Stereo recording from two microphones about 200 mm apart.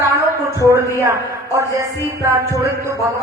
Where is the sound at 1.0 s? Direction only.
15° right (ahead or behind).